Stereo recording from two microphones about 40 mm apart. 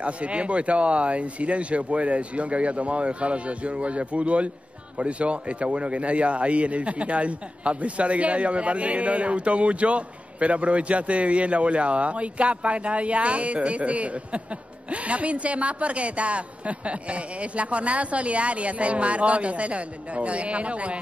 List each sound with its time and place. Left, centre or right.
0.0 s a man's voice: right